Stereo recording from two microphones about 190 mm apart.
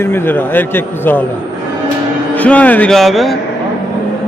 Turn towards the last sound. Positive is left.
turn(degrees=0)  # may be behind; listen again after turning